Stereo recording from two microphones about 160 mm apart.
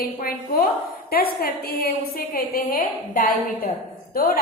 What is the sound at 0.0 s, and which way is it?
A woman's voice, 65° left (ahead or behind).